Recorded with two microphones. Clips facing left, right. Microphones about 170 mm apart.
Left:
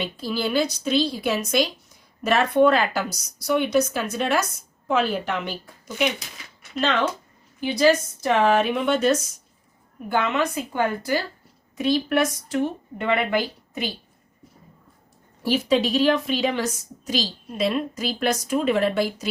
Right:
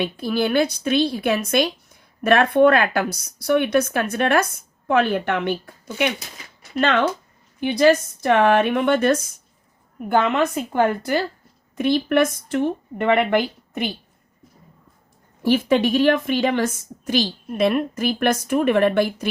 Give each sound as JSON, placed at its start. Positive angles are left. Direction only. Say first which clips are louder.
{"t": 0.0, "sound": "speech", "louder": "right 5 dB", "side_deg": -55}
{"t": 15.4, "sound": "speech", "louder": "right 3 dB", "side_deg": -55}